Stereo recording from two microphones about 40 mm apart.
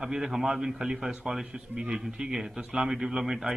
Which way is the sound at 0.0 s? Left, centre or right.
Centre.